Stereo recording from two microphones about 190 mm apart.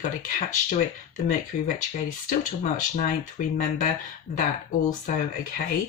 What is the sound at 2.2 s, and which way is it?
Speech, 40° left (ahead or behind).